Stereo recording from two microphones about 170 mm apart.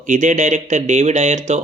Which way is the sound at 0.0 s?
45° right (ahead or behind).